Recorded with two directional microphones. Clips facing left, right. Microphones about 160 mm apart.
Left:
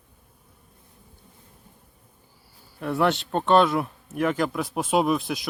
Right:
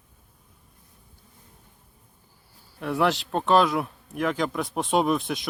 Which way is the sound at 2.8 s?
Centre (ahead or behind).